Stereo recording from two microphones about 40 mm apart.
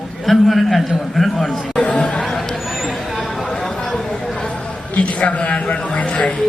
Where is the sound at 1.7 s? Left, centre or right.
Left.